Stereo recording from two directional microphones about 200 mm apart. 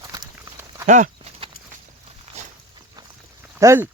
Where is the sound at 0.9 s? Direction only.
40° right (ahead or behind).